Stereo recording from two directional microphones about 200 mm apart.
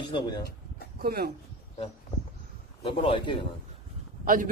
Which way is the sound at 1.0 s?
50° right (ahead or behind).